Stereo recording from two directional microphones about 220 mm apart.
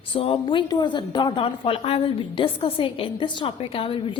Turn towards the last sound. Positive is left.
turn(degrees=25)  # may be behind; listen again after turning